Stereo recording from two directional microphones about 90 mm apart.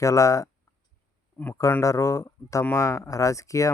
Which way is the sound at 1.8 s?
35° left (ahead or behind).